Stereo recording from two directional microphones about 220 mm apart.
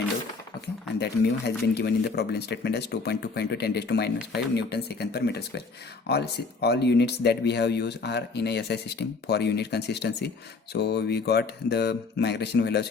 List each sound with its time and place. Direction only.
0.9 s speech: 50° left (ahead or behind)